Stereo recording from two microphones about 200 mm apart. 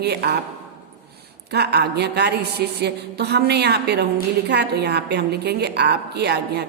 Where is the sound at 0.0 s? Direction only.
55° right (ahead or behind).